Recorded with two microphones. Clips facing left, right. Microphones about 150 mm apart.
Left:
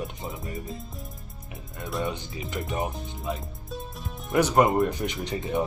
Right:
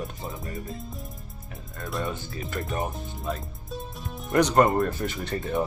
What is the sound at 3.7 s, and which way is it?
Speech, centre (ahead or behind).